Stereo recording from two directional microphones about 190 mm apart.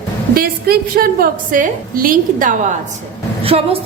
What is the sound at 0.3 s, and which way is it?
A woman's voice, 50° right (ahead or behind).